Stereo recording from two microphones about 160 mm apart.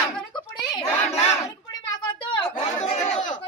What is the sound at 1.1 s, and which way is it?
Speech, 40° left (ahead or behind).